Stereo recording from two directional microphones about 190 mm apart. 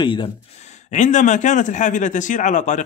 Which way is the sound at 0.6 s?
40° left (ahead or behind).